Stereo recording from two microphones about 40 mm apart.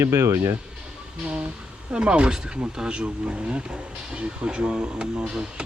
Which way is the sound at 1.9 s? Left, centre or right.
Right.